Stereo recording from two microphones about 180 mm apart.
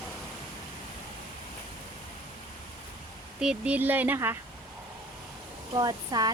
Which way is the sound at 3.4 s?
5° right (ahead or behind).